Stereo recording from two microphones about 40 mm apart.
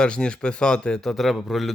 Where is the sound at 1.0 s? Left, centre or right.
Centre.